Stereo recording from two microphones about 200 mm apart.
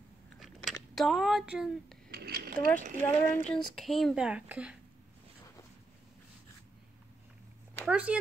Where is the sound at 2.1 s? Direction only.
50° right (ahead or behind).